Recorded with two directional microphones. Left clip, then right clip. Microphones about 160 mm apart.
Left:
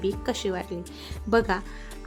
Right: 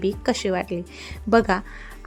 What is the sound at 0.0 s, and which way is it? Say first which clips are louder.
A woman's voice: right 4 dB; 30° right (ahead or behind).